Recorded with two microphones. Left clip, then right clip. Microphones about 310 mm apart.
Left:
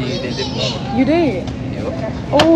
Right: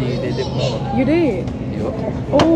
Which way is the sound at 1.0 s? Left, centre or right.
Centre.